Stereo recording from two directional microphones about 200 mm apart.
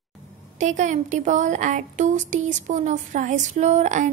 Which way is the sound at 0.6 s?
40° right (ahead or behind).